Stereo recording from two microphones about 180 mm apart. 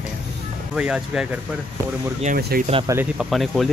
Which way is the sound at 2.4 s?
60° right (ahead or behind).